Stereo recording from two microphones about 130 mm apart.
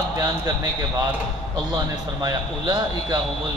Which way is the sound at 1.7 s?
30° right (ahead or behind).